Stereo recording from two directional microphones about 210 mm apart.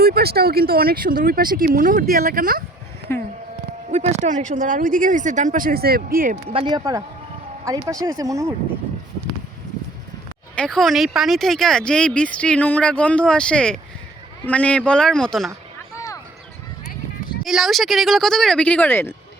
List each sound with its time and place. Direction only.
0.0 s speech: 50° right (ahead or behind)
3.1 s speech: 10° left (ahead or behind)
3.8 s speech: 30° right (ahead or behind)
6.5 s speech: 25° right (ahead or behind)
10.5 s speech: 5° left (ahead or behind)
16.0 s basketball bounce: 15° left (ahead or behind)
17.4 s speech: centre (ahead or behind)